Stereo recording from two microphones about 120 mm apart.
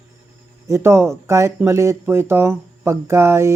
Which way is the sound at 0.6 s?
25° right (ahead or behind).